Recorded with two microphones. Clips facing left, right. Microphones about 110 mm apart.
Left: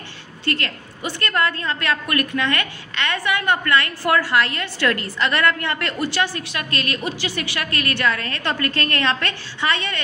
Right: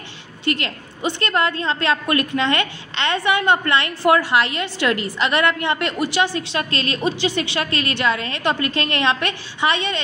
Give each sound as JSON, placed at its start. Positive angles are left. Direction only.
{"t": 0.5, "sound": "a woman's voice", "side_deg": -20}